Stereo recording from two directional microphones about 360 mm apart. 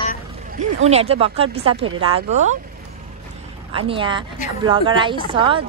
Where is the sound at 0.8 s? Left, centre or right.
Centre.